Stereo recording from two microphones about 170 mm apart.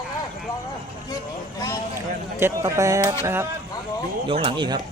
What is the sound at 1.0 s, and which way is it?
Vehicle, 20° left (ahead or behind).